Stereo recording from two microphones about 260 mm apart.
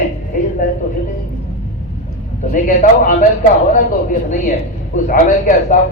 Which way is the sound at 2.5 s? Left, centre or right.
Left.